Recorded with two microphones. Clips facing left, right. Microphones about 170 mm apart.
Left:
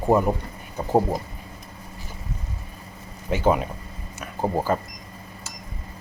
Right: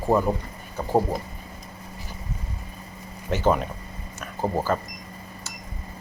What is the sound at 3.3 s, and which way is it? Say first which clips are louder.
A man's voice: left 1 dB; 10° left (ahead or behind).